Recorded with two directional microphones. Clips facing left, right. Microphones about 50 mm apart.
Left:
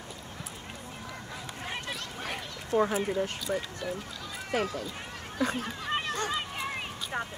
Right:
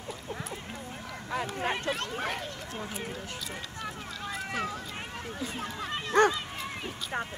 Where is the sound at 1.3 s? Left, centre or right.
Right.